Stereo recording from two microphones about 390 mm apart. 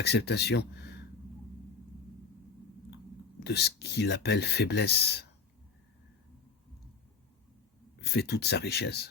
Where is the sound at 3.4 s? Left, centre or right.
Left.